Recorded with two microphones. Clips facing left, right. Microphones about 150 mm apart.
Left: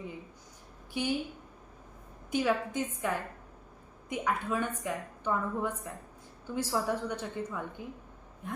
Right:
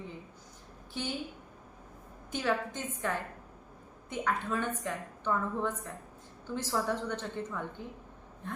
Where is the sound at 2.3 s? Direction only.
10° left (ahead or behind).